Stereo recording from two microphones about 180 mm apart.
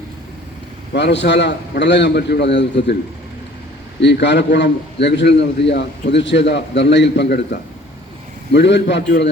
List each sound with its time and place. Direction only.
0.9 s a man's voice: 75° left (ahead or behind)
4.0 s a man's voice: 75° left (ahead or behind)